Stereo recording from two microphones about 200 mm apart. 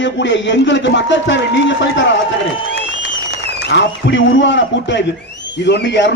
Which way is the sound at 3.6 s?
65° left (ahead or behind).